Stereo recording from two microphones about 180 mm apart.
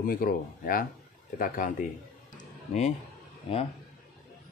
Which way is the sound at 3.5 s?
30° left (ahead or behind).